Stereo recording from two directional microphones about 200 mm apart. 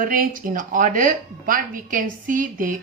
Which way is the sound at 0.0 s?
45° right (ahead or behind).